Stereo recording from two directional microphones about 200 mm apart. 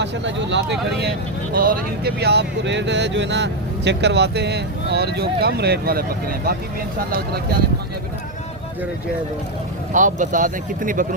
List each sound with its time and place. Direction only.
0.0 s speech: 65° right (ahead or behind)
1.5 s speech: 45° right (ahead or behind)
9.9 s speech: 40° right (ahead or behind)